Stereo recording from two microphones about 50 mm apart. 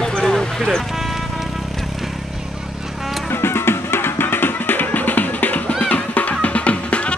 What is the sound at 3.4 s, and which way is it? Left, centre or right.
Music, left.